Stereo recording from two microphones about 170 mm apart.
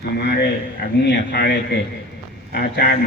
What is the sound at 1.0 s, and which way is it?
Speech, 80° left.